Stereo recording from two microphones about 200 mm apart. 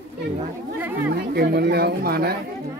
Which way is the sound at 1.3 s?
55° right (ahead or behind).